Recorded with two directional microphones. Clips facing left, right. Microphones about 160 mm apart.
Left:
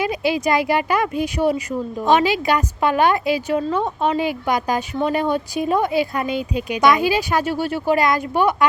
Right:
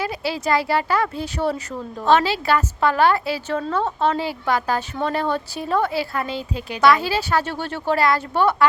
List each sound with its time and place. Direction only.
0.0 s speech: 15° left (ahead or behind)